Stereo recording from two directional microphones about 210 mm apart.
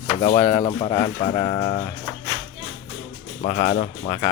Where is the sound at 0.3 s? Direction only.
20° left (ahead or behind).